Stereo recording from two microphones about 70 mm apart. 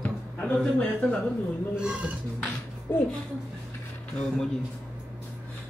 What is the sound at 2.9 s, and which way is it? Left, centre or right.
Speech, left.